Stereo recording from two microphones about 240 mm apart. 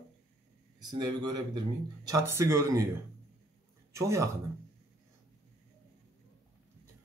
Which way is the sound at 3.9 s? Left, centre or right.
Centre.